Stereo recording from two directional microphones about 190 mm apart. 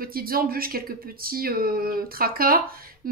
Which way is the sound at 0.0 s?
50° right (ahead or behind).